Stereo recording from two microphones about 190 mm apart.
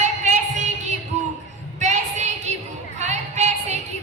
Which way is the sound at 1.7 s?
35° right (ahead or behind).